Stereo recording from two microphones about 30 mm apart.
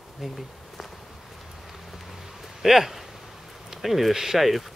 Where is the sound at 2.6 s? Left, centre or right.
Centre.